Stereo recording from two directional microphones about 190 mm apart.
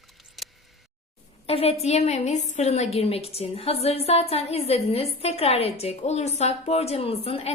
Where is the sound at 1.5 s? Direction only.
35° left (ahead or behind).